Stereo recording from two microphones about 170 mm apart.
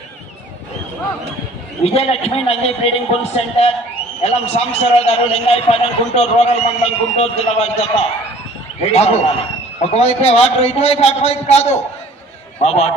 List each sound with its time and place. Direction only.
1.8 s a man's voice: 35° left (ahead or behind)